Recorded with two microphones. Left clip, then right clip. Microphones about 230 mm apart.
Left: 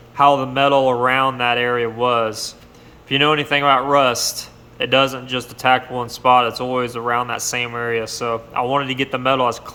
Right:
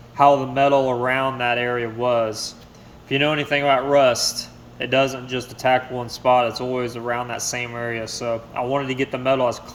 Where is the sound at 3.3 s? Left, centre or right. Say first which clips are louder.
Left 3 dB; left.